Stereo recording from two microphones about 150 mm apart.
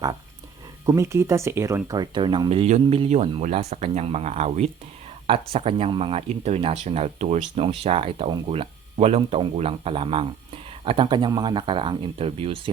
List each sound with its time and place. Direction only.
0.9 s speech: 20° right (ahead or behind); by 4.6 s 50° right (ahead or behind)
5.2 s speech: 40° right (ahead or behind)